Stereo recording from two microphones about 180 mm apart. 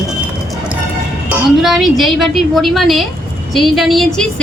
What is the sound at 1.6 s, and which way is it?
A woman's voice, centre (ahead or behind).